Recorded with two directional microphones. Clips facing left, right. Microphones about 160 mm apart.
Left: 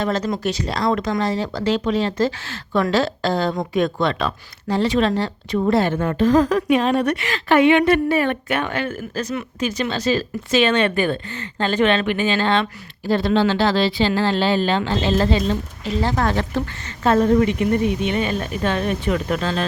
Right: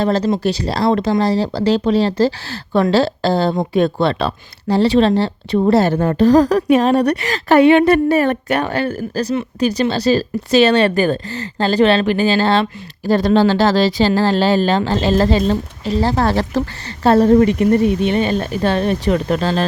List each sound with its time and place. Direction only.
0.0 s a woman's voice: 35° right (ahead or behind)